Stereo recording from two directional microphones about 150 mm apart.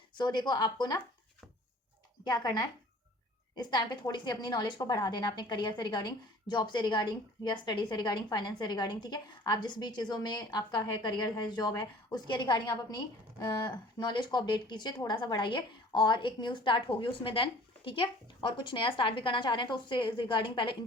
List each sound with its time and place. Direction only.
0.2 s speech: 30° left (ahead or behind)
2.2 s a woman's voice: 30° left (ahead or behind)